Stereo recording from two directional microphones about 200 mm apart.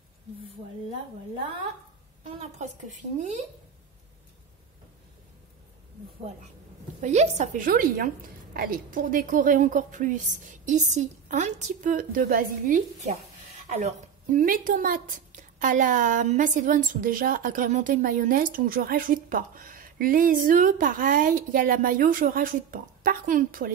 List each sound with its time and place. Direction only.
2.6 s a woman's voice: 35° right (ahead or behind)
7.0 s a woman's voice: 35° right (ahead or behind)